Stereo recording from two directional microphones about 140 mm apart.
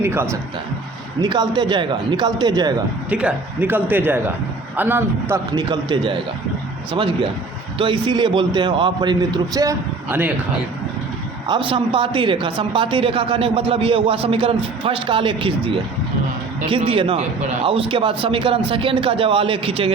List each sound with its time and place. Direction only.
0.0 s a man's voice: 15° right (ahead or behind)
1.2 s a woman's voice: 30° right (ahead or behind)
3.1 s a man's voice: 10° right (ahead or behind)
5.5 s a woman's voice: 30° right (ahead or behind)
10.1 s a man's voice: 10° right (ahead or behind)
11.4 s a woman's voice: 35° right (ahead or behind)